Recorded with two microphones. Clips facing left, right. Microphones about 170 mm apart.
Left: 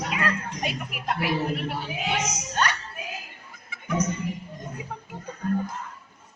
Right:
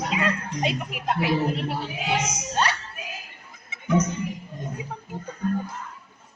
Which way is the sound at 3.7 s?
20° right (ahead or behind).